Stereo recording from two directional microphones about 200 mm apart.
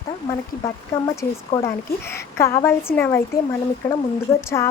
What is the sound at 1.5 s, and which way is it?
Speech, 25° left (ahead or behind).